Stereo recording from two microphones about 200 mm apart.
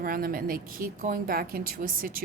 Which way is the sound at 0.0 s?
45° right (ahead or behind).